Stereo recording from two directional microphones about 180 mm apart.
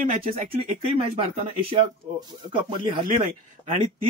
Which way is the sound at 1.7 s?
25° right (ahead or behind).